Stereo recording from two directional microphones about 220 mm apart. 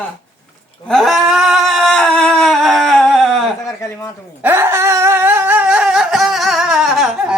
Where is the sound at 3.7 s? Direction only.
10° left (ahead or behind).